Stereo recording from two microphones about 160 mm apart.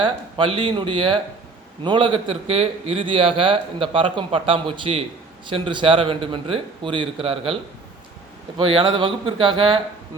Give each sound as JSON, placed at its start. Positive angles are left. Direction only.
{"t": 0.0, "sound": "a man's voice", "side_deg": -30}
{"t": 8.5, "sound": "a man's voice", "side_deg": -30}